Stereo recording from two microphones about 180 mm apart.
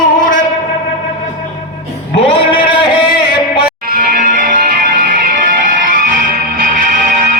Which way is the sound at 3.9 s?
50° right (ahead or behind).